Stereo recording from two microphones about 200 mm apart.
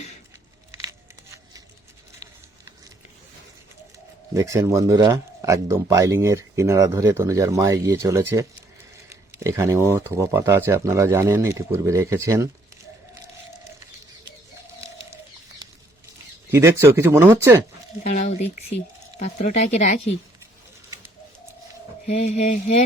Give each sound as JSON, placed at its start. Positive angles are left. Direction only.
{"t": 0.8, "sound": "a sound", "side_deg": -15}
{"t": 4.4, "sound": "speech", "side_deg": -15}
{"t": 16.5, "sound": "speech", "side_deg": -15}
{"t": 18.0, "sound": "speech", "side_deg": 35}
{"t": 22.0, "sound": "speech", "side_deg": 35}